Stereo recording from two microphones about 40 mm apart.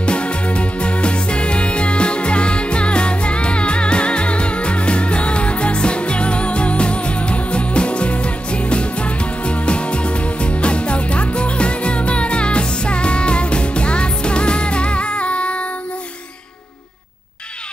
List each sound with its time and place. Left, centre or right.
0.0 s music: left